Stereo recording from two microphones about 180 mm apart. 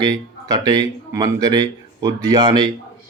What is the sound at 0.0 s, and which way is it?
Speech, 20° right (ahead or behind).